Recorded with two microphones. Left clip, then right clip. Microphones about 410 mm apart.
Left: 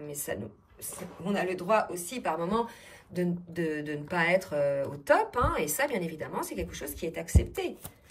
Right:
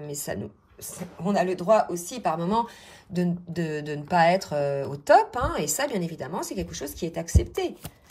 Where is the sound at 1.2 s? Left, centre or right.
Centre.